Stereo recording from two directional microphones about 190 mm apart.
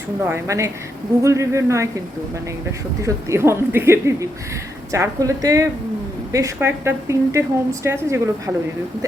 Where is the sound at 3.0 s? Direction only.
15° right (ahead or behind).